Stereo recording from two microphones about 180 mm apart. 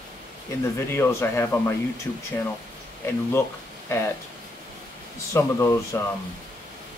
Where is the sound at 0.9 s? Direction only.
15° left (ahead or behind).